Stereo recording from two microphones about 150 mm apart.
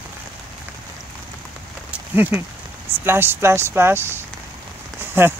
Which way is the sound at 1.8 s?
10° right (ahead or behind).